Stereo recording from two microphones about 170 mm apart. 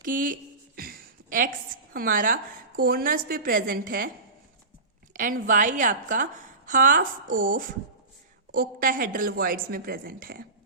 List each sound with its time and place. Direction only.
0.0 s a woman's voice: 50° right (ahead or behind)
5.1 s a woman's voice: 50° right (ahead or behind)